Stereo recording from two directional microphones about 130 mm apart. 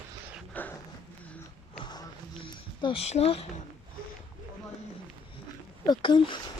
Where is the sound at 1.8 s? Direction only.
35° left (ahead or behind).